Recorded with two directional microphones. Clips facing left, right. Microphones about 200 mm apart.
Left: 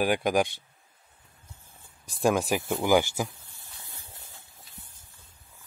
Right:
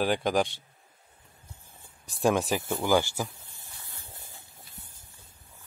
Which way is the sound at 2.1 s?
5° left (ahead or behind).